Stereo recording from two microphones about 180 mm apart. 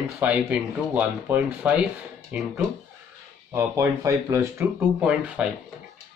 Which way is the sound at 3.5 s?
15° right (ahead or behind).